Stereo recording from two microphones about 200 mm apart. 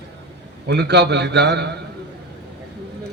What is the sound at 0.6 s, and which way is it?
A man's voice, 55° right (ahead or behind).